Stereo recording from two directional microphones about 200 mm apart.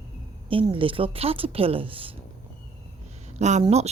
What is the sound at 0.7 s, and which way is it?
Speech, 25° right (ahead or behind).